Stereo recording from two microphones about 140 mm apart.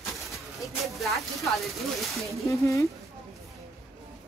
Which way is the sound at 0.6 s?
Centre (ahead or behind).